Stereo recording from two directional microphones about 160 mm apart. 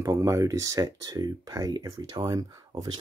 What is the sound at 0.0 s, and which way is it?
Speech, 20° right (ahead or behind).